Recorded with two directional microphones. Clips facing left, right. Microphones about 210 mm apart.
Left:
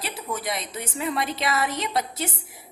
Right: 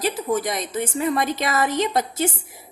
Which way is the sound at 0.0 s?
45° right (ahead or behind).